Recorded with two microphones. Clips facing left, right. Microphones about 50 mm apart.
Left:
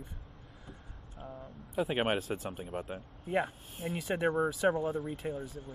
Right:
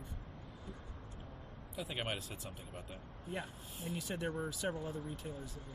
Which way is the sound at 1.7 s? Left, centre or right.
Left.